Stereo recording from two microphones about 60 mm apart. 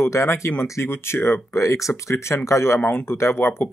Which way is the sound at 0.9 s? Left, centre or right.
Left.